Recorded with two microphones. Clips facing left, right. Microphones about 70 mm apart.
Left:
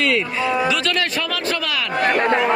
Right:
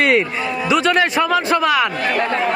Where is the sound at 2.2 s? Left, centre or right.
Centre.